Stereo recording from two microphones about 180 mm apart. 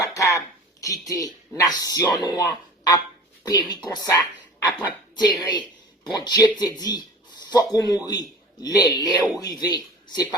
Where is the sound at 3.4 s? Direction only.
20° left (ahead or behind).